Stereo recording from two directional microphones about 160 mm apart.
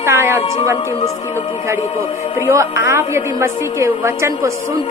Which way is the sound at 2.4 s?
15° right (ahead or behind).